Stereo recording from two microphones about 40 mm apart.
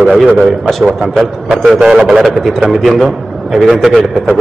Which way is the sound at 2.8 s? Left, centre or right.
Centre.